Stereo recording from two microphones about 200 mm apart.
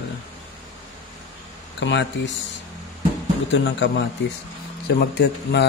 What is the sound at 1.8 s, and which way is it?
Speech, 65° left (ahead or behind).